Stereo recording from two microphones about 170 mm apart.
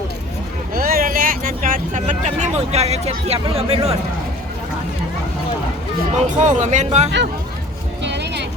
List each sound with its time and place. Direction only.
0.7 s speech: 60° right (ahead or behind); by 3.9 s 35° right (ahead or behind)
6.2 s speech: 45° right (ahead or behind)
8.0 s music: 90° right